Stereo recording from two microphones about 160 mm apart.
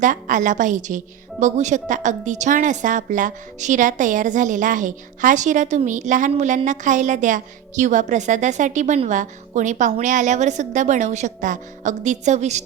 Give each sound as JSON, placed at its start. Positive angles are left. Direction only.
{"t": 0.0, "sound": "a woman's voice", "side_deg": -55}